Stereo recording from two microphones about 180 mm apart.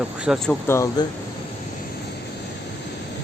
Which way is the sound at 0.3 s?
5° right (ahead or behind).